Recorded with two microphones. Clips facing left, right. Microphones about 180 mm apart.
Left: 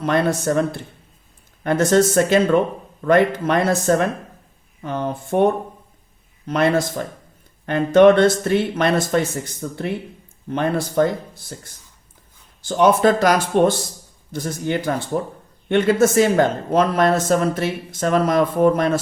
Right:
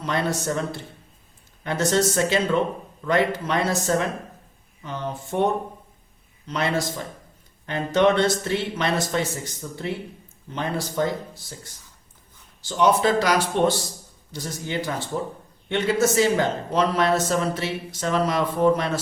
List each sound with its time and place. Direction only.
0.0 s speech: 55° left (ahead or behind)
6.5 s speech: 55° left (ahead or behind)